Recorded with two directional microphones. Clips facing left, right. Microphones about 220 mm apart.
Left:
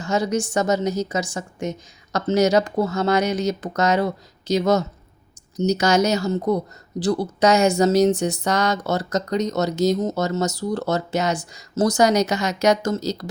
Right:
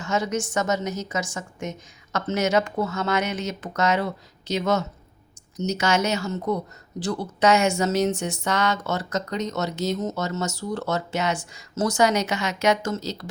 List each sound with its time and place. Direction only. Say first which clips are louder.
0.0 s speech: left 4 dB; 35° left (ahead or behind)